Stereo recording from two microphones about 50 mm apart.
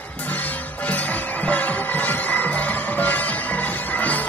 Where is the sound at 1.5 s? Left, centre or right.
Left.